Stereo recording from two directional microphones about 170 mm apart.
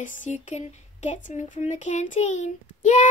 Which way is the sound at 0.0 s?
50° left (ahead or behind).